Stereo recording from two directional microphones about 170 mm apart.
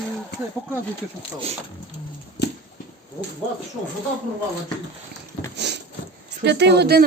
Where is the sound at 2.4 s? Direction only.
85° left.